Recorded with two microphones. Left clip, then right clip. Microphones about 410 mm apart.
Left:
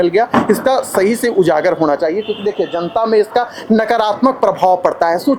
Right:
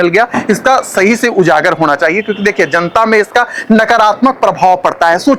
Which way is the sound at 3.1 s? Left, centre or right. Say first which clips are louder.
Right 4 dB; centre.